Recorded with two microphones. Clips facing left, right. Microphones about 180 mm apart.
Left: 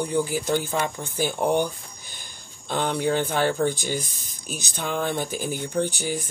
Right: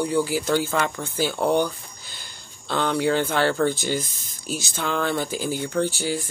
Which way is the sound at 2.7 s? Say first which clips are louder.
Right 2 dB; 15° left (ahead or behind).